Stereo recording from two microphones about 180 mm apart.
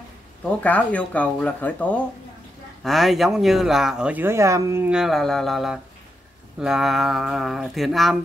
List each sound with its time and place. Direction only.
0.5 s speech: 10° left (ahead or behind)